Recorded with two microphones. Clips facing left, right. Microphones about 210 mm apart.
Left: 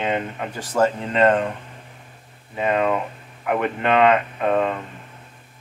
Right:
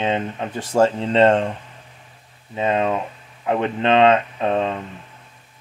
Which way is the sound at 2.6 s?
25° right (ahead or behind).